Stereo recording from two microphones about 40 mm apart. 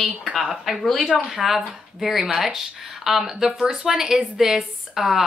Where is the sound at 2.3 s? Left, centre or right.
Centre.